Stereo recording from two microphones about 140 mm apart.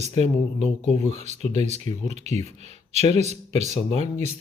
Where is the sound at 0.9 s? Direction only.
55° right (ahead or behind).